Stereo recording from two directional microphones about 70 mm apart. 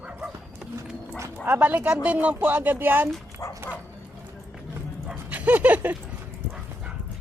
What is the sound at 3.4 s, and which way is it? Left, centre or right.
Bow-wow, left.